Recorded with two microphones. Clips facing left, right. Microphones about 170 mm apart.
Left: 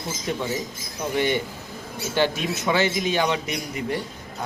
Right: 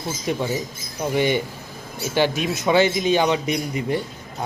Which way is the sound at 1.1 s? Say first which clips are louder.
Right 3 dB; 15° right (ahead or behind).